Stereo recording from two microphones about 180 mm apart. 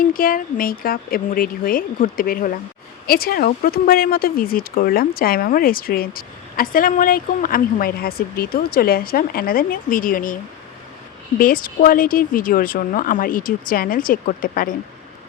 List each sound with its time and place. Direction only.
0.0 s speech: 50° left (ahead or behind)
11.3 s speech: 50° left (ahead or behind)